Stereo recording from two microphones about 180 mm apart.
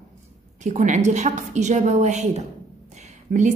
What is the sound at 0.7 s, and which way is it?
A woman's voice, 40° right (ahead or behind).